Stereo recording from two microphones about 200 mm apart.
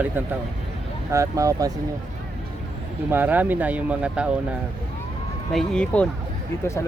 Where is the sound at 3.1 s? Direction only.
10° right (ahead or behind).